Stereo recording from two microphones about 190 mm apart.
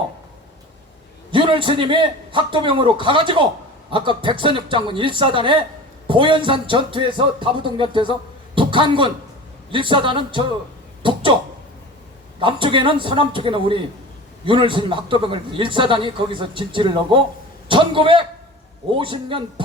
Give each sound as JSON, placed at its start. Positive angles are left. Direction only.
{"t": 1.3, "sound": "a man's voice", "side_deg": -25}
{"t": 12.4, "sound": "a man's voice", "side_deg": -25}